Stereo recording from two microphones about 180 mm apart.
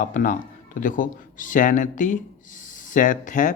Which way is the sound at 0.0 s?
45° left (ahead or behind).